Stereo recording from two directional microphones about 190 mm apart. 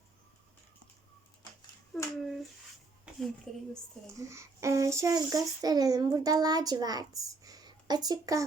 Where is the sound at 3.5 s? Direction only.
Centre (ahead or behind).